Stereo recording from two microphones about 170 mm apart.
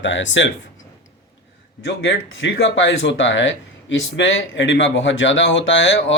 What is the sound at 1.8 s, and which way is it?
Speech, 90° left.